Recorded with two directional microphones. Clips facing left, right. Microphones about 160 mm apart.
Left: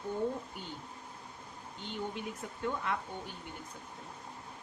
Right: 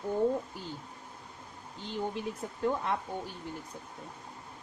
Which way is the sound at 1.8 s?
35° right (ahead or behind).